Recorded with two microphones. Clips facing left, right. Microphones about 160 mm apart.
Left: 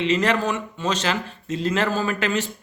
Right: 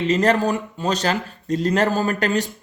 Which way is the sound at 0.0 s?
40° right (ahead or behind).